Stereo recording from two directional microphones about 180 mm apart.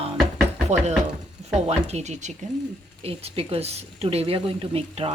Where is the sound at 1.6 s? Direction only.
35° right (ahead or behind).